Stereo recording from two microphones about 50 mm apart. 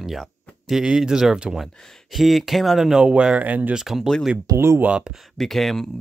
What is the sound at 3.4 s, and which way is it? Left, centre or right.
Speech, right.